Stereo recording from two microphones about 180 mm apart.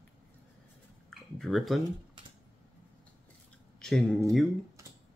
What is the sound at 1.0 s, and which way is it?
Speech, centre (ahead or behind).